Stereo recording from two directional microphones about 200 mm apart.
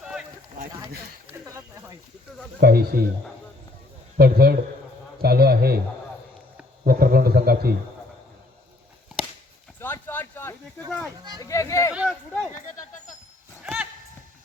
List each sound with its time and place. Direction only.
0.0 s boat: 5° right (ahead or behind)
1.5 s a sound: 15° right (ahead or behind)
2.6 s speech: 50° right (ahead or behind)
4.2 s speech: 50° right (ahead or behind)
6.8 s speech: 50° right (ahead or behind)
9.8 s a sound: 10° left (ahead or behind)
10.8 s speech: 5° left (ahead or behind)
11.3 s speech: 15° left (ahead or behind)
11.9 s speech: centre (ahead or behind)
13.6 s a sound: 5° right (ahead or behind)